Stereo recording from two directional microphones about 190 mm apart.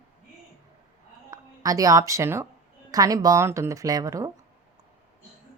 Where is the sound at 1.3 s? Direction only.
20° right (ahead or behind).